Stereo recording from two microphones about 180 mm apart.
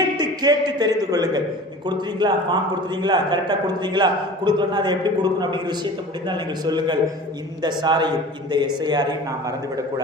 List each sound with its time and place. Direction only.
0.2 s a man's voice: 20° right (ahead or behind)